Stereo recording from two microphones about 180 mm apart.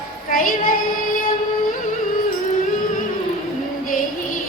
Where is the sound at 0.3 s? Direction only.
50° left (ahead or behind).